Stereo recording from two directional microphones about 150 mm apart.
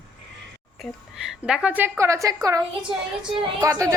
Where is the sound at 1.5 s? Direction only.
5° right (ahead or behind).